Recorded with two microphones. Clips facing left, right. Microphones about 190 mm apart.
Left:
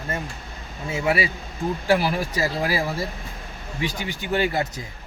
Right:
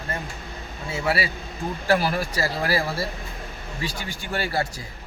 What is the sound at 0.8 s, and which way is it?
Speech, 20° left (ahead or behind).